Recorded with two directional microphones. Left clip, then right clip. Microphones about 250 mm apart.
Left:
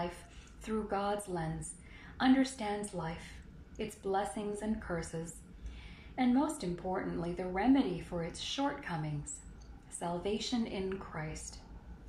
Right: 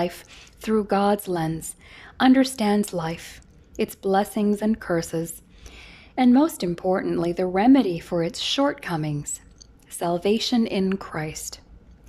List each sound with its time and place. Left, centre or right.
0.6 s a woman's voice: right